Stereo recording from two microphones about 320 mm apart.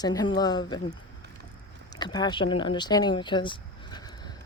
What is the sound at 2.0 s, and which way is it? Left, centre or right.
Speech, centre.